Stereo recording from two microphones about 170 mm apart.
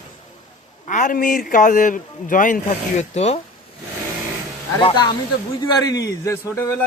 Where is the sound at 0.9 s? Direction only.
50° left (ahead or behind).